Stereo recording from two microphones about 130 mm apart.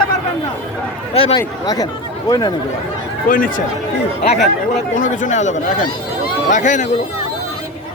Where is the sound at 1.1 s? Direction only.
50° left (ahead or behind).